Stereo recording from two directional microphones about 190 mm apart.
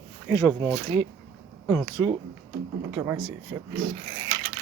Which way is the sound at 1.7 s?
10° left (ahead or behind).